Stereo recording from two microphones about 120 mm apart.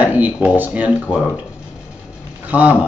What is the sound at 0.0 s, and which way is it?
Speech, 15° right (ahead or behind).